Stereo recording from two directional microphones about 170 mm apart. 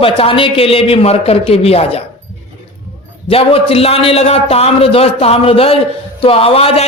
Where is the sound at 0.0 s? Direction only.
35° left (ahead or behind).